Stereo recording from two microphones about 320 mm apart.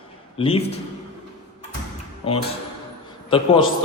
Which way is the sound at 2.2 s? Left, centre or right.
Centre.